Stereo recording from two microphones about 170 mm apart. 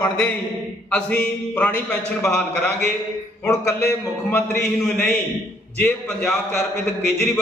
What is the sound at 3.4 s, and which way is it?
A man's voice, 15° left (ahead or behind).